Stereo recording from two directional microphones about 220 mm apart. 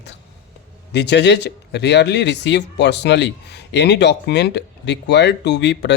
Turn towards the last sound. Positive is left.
turn(degrees=50)  # may be behind; listen again after turning